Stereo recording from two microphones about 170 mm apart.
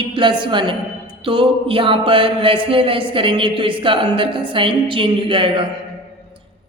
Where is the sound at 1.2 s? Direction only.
30° right (ahead or behind).